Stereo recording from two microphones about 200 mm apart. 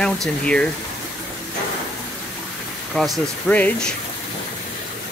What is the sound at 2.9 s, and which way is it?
Speech, 5° left (ahead or behind).